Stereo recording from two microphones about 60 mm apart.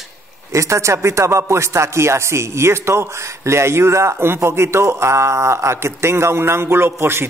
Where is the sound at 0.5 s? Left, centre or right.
Right.